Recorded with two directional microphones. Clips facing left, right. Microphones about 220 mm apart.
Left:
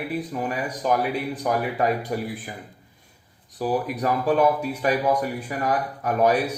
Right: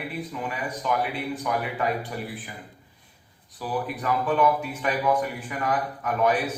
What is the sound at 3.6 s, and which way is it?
A man's voice, 40° left (ahead or behind).